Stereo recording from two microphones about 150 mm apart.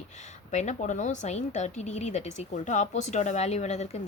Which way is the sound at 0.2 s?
50° left (ahead or behind).